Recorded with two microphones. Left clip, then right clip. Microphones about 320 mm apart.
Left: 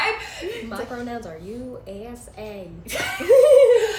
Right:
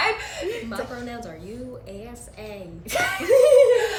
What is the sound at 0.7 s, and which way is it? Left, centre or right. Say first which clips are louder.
A woman's voice: left 1 dB; centre.